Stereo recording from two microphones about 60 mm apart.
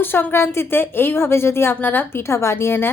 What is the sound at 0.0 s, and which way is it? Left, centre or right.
A woman's voice, left.